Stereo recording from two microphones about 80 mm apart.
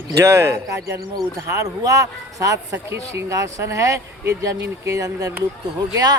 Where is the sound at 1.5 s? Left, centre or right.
Right.